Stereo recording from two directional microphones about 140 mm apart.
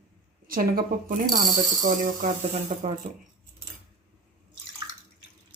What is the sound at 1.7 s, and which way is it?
Speech, 70° right (ahead or behind).